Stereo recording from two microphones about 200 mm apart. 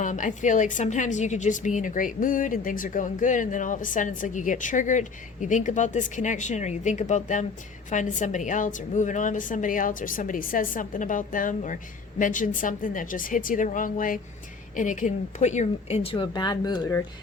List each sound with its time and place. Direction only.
0.0 s a woman's voice: 40° left (ahead or behind); by 17.0 s 20° left (ahead or behind)